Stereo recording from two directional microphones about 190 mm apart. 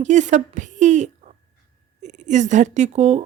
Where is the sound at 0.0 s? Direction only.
40° right (ahead or behind).